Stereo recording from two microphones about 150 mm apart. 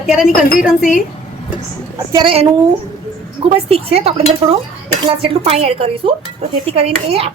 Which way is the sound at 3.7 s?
40° right (ahead or behind).